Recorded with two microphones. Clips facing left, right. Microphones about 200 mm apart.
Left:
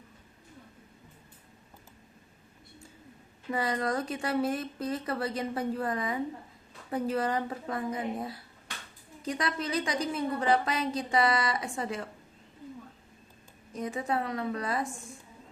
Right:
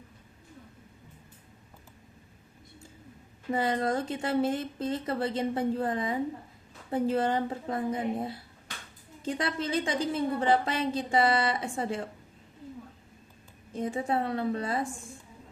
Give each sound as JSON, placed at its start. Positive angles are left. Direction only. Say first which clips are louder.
{"t": 3.5, "sound": "a woman's voice", "louder": "right 2 dB", "side_deg": -25}
{"t": 13.7, "sound": "a woman's voice", "louder": "right 2 dB", "side_deg": -30}